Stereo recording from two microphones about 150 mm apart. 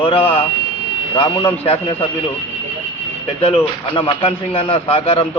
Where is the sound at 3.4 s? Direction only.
40° left (ahead or behind).